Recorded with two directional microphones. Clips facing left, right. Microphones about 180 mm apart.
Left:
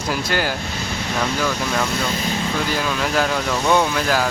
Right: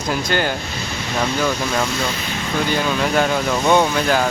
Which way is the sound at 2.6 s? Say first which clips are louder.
Right 3 dB; centre (ahead or behind).